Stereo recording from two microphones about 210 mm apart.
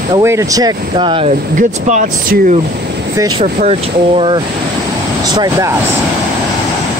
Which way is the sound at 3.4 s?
30° right (ahead or behind).